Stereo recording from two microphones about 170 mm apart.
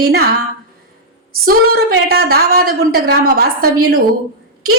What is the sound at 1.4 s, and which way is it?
A woman's voice, 60° right (ahead or behind).